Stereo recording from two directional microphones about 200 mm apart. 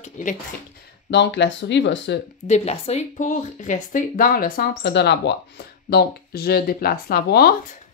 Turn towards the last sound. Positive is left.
turn(degrees=50)  # may be behind; listen again after turning